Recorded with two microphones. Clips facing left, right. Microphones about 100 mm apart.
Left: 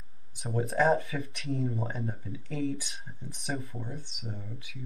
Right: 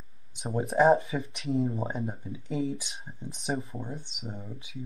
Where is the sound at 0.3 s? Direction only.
25° right (ahead or behind).